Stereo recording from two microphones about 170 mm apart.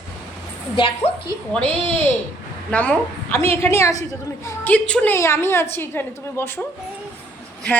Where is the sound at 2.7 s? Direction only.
10° left (ahead or behind).